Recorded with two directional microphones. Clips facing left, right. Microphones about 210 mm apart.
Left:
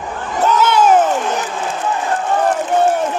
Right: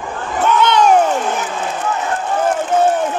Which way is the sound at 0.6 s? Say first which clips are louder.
Even; 5° left (ahead or behind).